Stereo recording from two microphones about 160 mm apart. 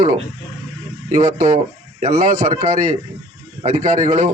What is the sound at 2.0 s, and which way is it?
A man's voice, 55° right (ahead or behind).